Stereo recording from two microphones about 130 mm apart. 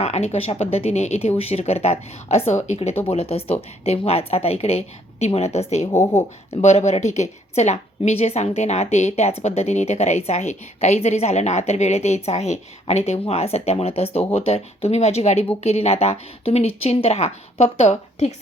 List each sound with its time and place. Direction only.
0.0 s speech: 55° left (ahead or behind)
5.9 s speech: 20° left (ahead or behind)
6.5 s a woman's voice: 55° left (ahead or behind)